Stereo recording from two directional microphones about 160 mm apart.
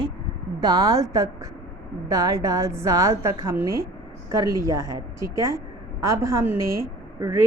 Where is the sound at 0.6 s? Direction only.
25° right (ahead or behind).